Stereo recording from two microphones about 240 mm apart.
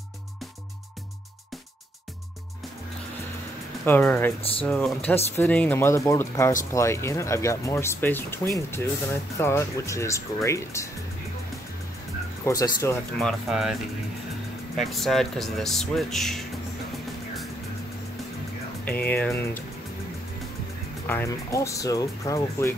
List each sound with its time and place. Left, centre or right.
3.8 s speech: centre
4.4 s speech: left
4.6 s speech: centre
12.4 s speech: centre
13.2 s speech: centre
14.8 s speech: centre
18.9 s speech: centre
21.1 s speech: centre